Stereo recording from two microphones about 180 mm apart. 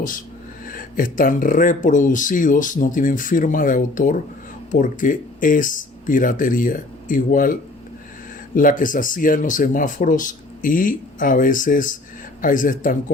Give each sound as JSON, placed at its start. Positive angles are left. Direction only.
{"t": 0.7, "sound": "speech", "side_deg": 50}
{"t": 8.5, "sound": "speech", "side_deg": 50}